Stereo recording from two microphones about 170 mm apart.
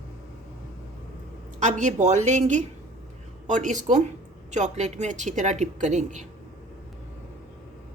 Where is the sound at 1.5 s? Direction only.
45° right (ahead or behind).